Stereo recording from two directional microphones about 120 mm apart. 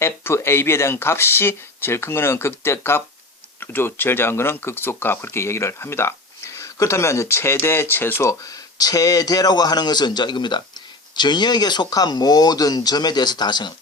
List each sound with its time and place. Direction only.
0.0 s speech: 20° left (ahead or behind); by 13.7 s 35° left (ahead or behind)